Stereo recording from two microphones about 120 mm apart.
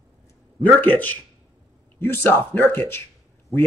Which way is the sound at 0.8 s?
15° left (ahead or behind).